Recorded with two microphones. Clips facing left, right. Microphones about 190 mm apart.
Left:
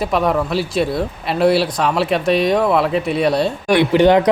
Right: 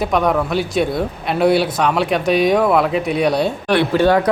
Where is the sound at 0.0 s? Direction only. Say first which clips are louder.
Even; centre (ahead or behind).